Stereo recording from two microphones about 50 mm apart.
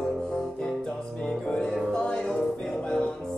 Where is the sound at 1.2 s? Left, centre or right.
Centre.